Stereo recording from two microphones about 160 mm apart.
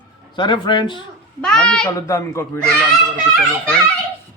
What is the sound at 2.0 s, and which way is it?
Speech, 20° left (ahead or behind).